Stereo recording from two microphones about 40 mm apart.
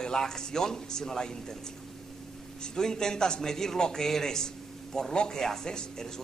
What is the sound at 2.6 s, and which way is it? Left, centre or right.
A man's voice, centre.